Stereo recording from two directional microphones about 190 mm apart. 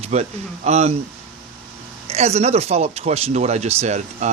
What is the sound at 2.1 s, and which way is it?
Speech, 35° right (ahead or behind).